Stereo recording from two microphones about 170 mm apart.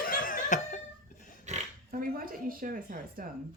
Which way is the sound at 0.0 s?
55° left (ahead or behind).